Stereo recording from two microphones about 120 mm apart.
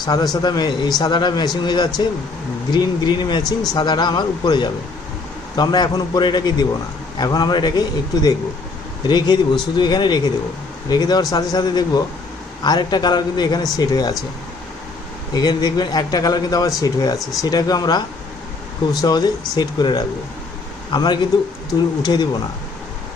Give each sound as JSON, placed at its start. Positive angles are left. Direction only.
{"t": 0.0, "sound": "a man's voice", "side_deg": 35}
{"t": 15.3, "sound": "a man's voice", "side_deg": 35}